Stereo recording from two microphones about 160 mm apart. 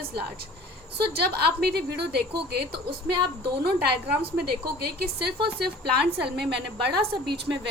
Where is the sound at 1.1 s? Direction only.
90° right.